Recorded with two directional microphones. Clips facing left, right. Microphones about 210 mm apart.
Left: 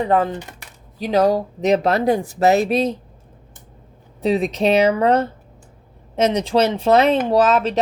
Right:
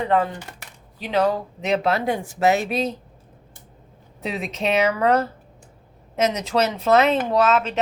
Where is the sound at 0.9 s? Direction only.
40° left (ahead or behind).